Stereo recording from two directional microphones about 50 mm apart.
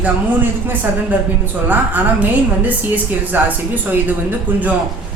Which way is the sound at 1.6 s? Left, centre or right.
Right.